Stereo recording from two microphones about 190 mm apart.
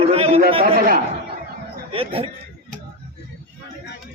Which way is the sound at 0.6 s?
40° right (ahead or behind).